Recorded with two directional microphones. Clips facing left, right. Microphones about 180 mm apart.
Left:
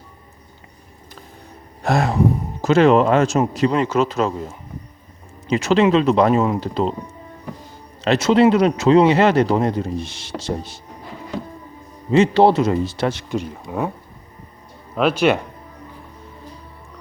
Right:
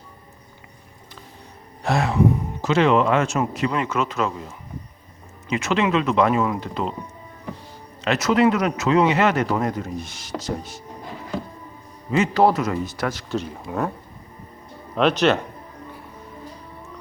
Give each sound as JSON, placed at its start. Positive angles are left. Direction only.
{"t": 1.8, "sound": "speech", "side_deg": 40}
{"t": 8.0, "sound": "speech", "side_deg": 30}
{"t": 12.1, "sound": "speech", "side_deg": 30}
{"t": 13.7, "sound": "speech", "side_deg": 10}
{"t": 14.9, "sound": "speech", "side_deg": 10}